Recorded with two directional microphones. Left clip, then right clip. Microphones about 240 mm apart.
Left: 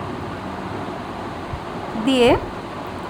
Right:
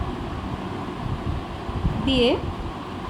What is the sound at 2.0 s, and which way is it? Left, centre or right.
Speech, left.